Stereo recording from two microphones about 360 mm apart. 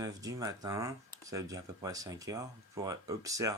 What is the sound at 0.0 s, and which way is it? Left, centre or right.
Speech, centre.